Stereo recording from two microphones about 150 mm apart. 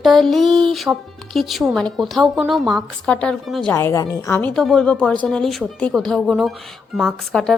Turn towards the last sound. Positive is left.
turn(degrees=0)  # may be behind; listen again after turning